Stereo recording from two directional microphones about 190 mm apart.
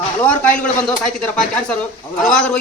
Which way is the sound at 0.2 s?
5° left (ahead or behind).